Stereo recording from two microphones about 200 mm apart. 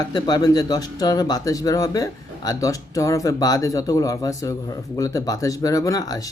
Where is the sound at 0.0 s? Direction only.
20° left (ahead or behind).